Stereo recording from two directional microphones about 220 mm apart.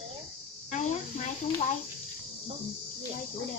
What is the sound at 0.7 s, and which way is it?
Cricket, 35° left (ahead or behind).